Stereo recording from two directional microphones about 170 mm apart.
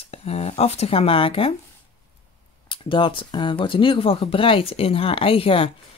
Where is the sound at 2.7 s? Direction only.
30° left (ahead or behind).